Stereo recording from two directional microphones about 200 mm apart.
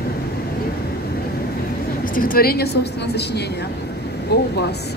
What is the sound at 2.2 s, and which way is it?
A woman's voice, 45° left (ahead or behind).